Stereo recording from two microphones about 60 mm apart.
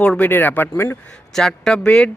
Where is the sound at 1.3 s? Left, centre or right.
Centre.